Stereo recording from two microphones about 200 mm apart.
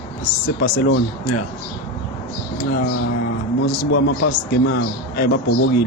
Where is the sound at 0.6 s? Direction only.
45° left (ahead or behind).